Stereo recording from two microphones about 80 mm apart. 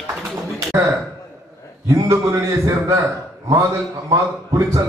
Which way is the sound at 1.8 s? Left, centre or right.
Right.